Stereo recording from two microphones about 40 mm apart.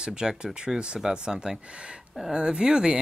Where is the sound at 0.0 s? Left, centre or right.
Centre.